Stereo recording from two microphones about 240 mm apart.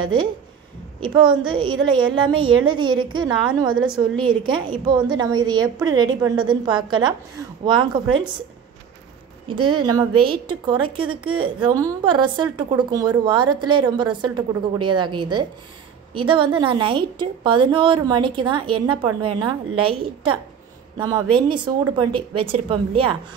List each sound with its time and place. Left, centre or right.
1.0 s a woman's voice: centre
9.5 s a woman's voice: centre